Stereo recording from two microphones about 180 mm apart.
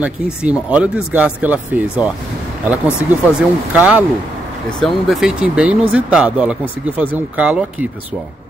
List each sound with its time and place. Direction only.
0.0 s speech: 5° right (ahead or behind)
4.6 s speech: 5° left (ahead or behind)